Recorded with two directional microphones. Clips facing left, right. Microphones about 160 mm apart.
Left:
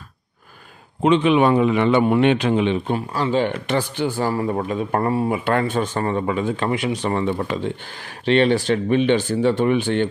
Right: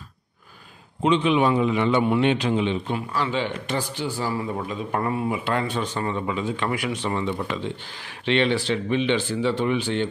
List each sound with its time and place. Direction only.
1.0 s a man's voice: 60° left (ahead or behind)
3.1 s speech: 35° left (ahead or behind)
3.4 s a man's voice: 60° left (ahead or behind)
5.0 s speech: 35° left (ahead or behind)
5.3 s speech: 55° left (ahead or behind)